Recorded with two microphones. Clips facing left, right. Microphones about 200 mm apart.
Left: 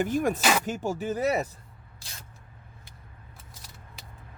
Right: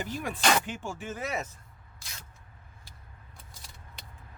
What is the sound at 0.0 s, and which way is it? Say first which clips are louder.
Speech: left 6 dB; 50° left (ahead or behind).